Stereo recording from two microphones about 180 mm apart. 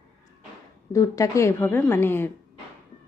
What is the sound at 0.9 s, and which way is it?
A woman's voice, 20° left (ahead or behind).